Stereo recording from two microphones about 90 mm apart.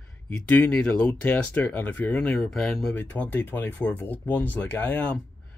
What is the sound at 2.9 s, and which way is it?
Speech, 20° left (ahead or behind).